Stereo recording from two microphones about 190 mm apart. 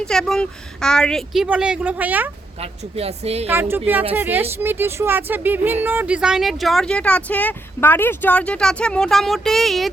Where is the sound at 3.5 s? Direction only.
10° right (ahead or behind).